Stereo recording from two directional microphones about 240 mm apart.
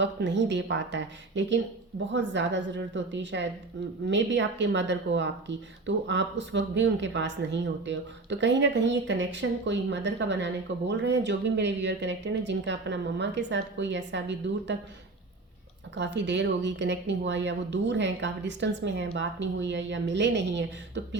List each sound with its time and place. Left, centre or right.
0.0 s speech: right
16.0 s speech: right